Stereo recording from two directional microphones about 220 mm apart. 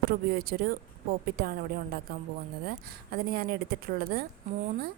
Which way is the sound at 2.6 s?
45° right (ahead or behind).